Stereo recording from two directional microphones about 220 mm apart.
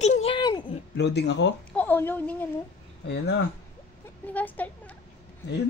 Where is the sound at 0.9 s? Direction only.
50° left (ahead or behind).